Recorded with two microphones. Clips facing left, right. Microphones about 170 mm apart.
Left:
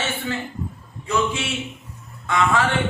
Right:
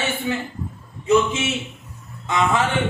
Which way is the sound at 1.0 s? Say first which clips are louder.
Right 5 dB; 20° right (ahead or behind).